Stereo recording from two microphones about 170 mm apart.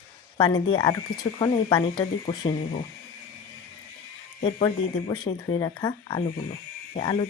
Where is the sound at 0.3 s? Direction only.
25° left (ahead or behind).